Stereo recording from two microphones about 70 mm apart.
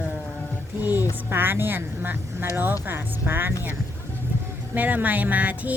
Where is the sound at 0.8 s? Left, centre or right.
Right.